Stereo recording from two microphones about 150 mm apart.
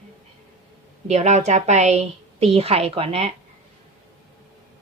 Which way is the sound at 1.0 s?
45° right (ahead or behind).